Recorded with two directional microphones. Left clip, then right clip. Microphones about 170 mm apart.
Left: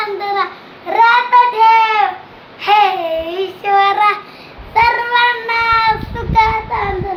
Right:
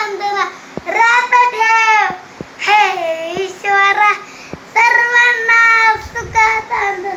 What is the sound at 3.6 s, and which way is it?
Child singing, 20° left (ahead or behind).